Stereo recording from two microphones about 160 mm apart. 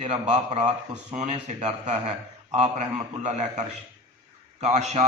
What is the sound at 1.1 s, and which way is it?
A man's voice, 50° right (ahead or behind).